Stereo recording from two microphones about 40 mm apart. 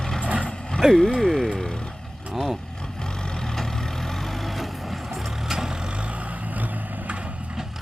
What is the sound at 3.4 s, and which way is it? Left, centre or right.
Vehicle, centre.